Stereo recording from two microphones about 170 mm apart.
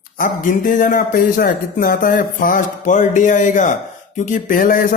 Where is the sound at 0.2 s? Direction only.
50° left (ahead or behind).